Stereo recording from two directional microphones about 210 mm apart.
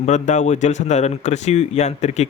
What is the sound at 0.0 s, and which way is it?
Speech, 35° left (ahead or behind).